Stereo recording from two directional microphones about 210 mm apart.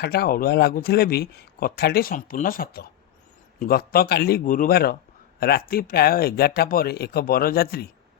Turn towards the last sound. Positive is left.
turn(degrees=45)  # may be behind; listen again after turning